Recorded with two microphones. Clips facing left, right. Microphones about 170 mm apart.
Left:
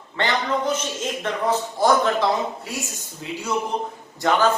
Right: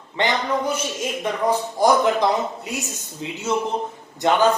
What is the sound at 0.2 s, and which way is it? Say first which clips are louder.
A man's voice: right 1 dB; 15° right (ahead or behind).